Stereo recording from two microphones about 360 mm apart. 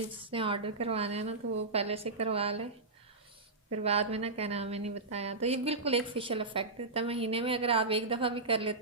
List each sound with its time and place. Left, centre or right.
0.2 s a woman's voice: centre
3.8 s a woman's voice: centre